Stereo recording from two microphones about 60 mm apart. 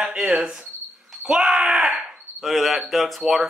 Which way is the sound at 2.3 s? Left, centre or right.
Centre.